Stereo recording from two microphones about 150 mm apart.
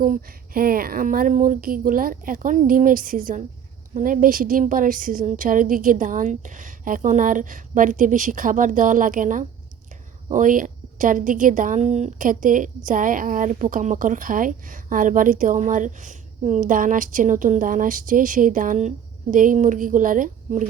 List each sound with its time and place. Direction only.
0.0 s a woman's voice: 70° right (ahead or behind)